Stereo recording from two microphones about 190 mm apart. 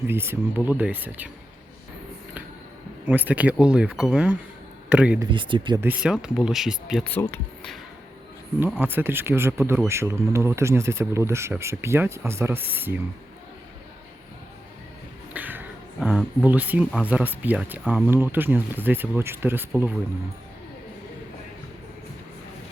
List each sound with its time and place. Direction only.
0.1 s speech: 10° right (ahead or behind)
3.1 s speech: 10° right (ahead or behind)
5.3 s speech: 25° right (ahead or behind)
5.8 s speech: 5° right (ahead or behind)
7.1 s speech: 10° left (ahead or behind)
8.5 s speech: 10° right (ahead or behind)
15.3 s speech: 10° right (ahead or behind)